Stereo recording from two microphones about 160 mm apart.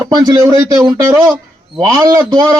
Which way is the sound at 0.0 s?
25° right (ahead or behind).